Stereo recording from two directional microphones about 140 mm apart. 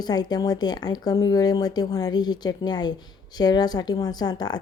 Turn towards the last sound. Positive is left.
turn(degrees=30)  # may be behind; listen again after turning